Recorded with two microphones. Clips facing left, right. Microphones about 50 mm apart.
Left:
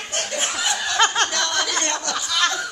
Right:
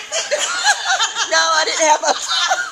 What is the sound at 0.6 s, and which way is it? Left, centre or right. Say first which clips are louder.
Snicker: right 10 dB; right.